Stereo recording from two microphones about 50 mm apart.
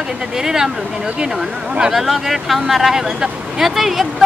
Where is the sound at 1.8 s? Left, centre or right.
Centre.